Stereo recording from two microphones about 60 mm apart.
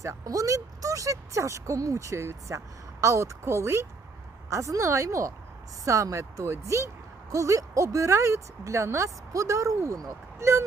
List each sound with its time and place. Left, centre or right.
0.0 s speech: right
6.4 s speech: right